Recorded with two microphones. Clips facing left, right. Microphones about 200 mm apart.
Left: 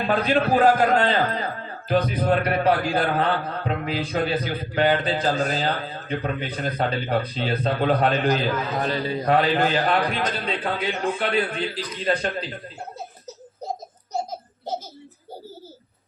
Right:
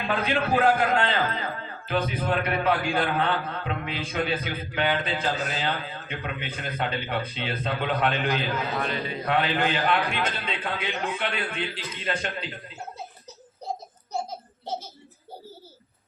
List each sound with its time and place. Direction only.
0.0 s a man's voice: 40° left (ahead or behind)